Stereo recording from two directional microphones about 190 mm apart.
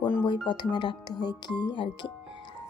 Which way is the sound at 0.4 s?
25° left (ahead or behind).